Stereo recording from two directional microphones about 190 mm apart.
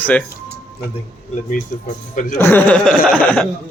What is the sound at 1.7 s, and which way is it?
Speech, 45° left (ahead or behind).